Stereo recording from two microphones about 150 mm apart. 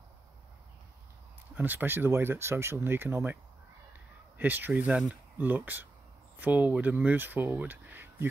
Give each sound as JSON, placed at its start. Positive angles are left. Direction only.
{"t": 1.5, "sound": "speech", "side_deg": -10}
{"t": 4.4, "sound": "speech", "side_deg": -10}